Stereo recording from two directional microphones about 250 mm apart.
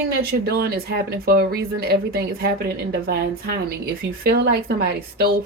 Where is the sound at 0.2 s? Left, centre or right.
Right.